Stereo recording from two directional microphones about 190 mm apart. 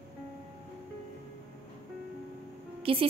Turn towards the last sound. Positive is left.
turn(degrees=-30)  # may be behind; listen again after turning